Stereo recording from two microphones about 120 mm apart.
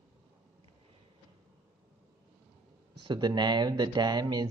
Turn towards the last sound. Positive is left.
turn(degrees=-35)  # may be behind; listen again after turning